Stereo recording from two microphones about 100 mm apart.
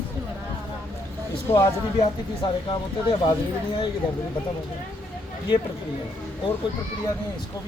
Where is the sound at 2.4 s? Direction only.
50° left (ahead or behind).